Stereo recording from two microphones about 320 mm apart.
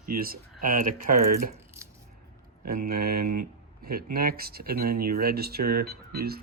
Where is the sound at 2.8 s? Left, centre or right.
Right.